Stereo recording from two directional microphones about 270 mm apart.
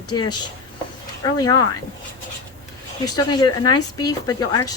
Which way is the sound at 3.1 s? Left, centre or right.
Centre.